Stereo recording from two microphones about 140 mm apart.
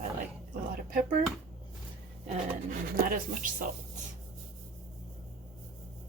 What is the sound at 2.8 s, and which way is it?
Speech, 90° right.